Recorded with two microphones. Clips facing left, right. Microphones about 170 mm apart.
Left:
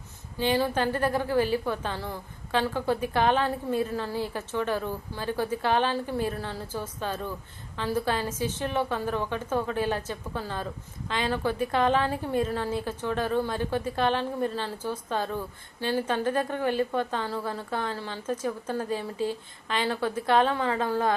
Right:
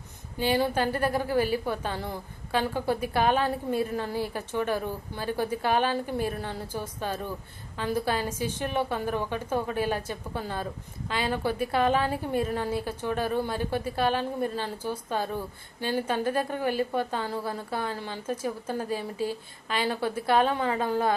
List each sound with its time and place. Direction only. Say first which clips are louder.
0.3 s a woman's voice: even; 10° right (ahead or behind)